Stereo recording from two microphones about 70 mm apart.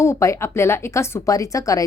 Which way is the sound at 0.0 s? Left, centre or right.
Left.